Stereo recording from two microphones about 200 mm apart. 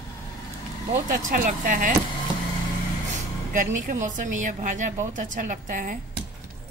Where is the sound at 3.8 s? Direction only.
40° right (ahead or behind).